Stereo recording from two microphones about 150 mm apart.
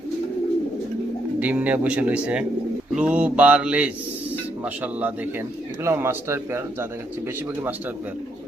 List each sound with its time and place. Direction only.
1.4 s speech: 10° right (ahead or behind)